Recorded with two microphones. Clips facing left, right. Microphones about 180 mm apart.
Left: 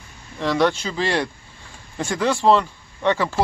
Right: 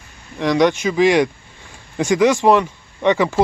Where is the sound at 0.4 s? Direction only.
15° right (ahead or behind).